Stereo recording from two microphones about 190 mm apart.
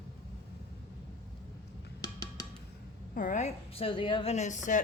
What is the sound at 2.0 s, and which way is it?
Music, 20° left (ahead or behind).